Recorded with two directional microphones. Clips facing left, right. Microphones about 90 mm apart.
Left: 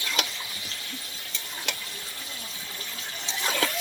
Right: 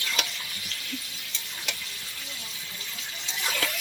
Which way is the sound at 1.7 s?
30° left (ahead or behind).